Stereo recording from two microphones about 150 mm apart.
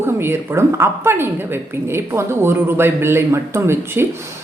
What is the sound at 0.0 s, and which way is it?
A woman's voice, 15° right (ahead or behind).